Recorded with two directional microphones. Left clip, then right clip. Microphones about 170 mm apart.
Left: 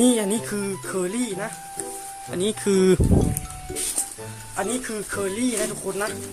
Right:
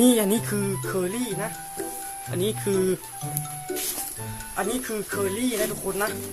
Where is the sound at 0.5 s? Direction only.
Centre (ahead or behind).